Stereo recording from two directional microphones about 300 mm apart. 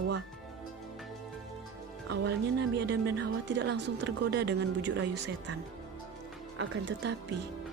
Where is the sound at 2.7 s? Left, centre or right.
Right.